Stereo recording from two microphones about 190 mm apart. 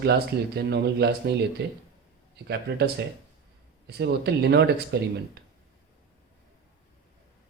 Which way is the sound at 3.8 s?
60° right (ahead or behind).